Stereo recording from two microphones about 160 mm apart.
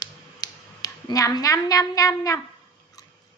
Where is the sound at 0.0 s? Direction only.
25° left (ahead or behind).